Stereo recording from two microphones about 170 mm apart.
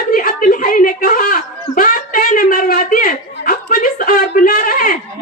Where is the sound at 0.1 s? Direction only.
55° left (ahead or behind).